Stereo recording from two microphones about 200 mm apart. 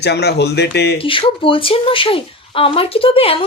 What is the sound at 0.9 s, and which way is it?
A woman's voice, 25° left (ahead or behind).